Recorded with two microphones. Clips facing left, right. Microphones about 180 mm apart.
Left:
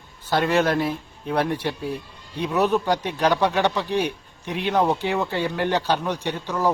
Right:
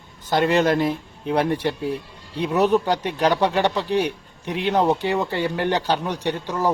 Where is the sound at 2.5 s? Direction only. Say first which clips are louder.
Right 2 dB; 15° right (ahead or behind).